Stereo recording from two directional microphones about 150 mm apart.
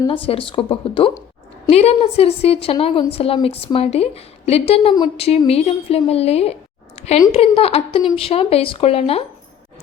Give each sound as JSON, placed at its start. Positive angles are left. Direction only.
{"t": 0.3, "sound": "a woman's voice", "side_deg": 35}